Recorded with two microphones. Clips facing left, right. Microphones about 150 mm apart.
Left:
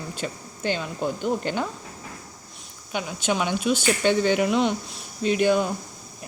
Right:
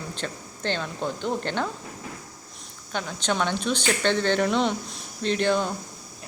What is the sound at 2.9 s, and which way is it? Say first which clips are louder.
Speech: left 2 dB; 10° left (ahead or behind).